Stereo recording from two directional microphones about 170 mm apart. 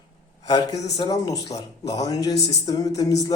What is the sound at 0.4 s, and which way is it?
A man's voice, 20° left (ahead or behind).